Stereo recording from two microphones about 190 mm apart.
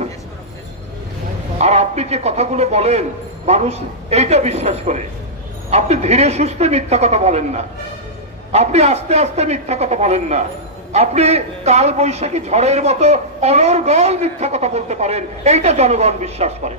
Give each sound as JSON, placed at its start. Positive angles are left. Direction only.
{"t": 1.6, "sound": "a man's voice", "side_deg": -35}